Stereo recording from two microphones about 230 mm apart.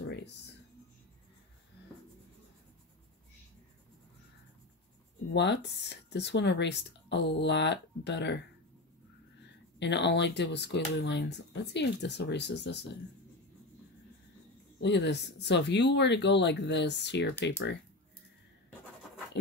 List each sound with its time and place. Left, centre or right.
0.0 s music: left
5.3 s speech: left
9.8 s speech: left
14.8 s speech: left